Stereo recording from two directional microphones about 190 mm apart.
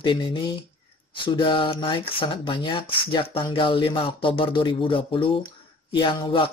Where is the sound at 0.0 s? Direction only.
25° left (ahead or behind).